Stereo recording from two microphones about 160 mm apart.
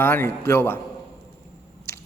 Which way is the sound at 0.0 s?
15° left (ahead or behind).